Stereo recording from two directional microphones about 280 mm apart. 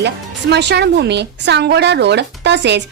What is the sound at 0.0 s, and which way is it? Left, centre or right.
Speech, right.